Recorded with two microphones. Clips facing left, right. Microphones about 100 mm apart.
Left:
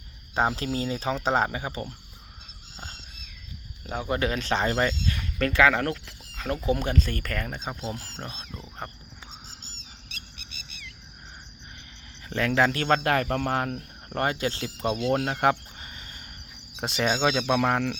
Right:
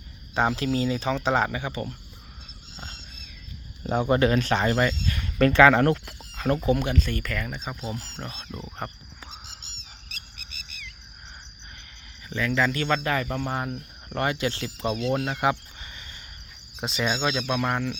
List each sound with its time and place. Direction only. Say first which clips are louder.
0.3 s speech: right 2 dB; 35° left (ahead or behind)
3.8 s speech: right 7 dB; 30° right (ahead or behind)
4.1 s speech: right 5 dB; 5° right (ahead or behind)
4.4 s speech: right 2 dB; 25° left (ahead or behind)
5.4 s speech: right 5 dB; 25° right (ahead or behind)
6.7 s speech: right 1 dB; 35° left (ahead or behind)
7.6 s speech: even; 25° left (ahead or behind)
12.3 s speech: left 2 dB; 60° left (ahead or behind)
14.1 s speech: even; 40° left (ahead or behind)
15.3 s a sound: left 1 dB; 50° left (ahead or behind)
16.7 s speech: left 1 dB; 60° left (ahead or behind)
17.6 s speech: left 2 dB; 85° left